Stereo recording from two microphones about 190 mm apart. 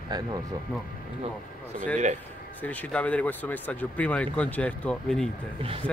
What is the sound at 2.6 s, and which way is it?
Speech, 10° left (ahead or behind).